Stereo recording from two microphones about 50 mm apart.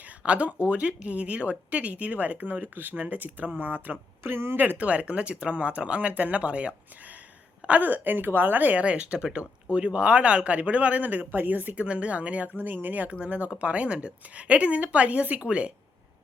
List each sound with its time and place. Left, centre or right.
0.2 s a man's voice: right
4.2 s speech: right
4.5 s a woman's voice: right
4.9 s a man's voice: right
7.7 s a woman's voice: right